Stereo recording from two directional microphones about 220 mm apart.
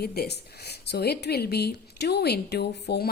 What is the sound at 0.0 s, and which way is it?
A woman's voice, 45° left (ahead or behind).